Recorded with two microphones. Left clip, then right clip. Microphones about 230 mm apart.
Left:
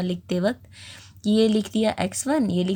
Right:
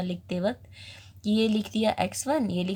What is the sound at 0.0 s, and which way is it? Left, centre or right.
A woman's voice, left.